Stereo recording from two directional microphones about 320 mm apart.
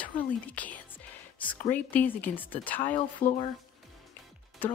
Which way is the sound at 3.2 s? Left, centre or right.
Left.